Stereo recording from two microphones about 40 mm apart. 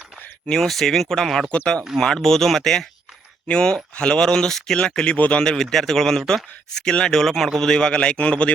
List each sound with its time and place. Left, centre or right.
0.4 s speech: centre
1.5 s speech: left
3.4 s speech: left
5.1 s speech: left
5.4 s speech: centre